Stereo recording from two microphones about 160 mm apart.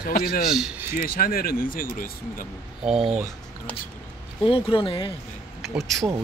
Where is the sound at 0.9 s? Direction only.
65° left (ahead or behind).